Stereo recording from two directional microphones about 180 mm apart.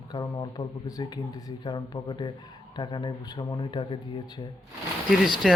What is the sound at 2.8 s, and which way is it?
Speech, 25° left (ahead or behind).